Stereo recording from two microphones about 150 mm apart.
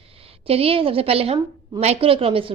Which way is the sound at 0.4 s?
40° right (ahead or behind).